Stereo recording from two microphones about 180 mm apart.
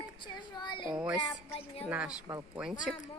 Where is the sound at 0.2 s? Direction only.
25° left (ahead or behind).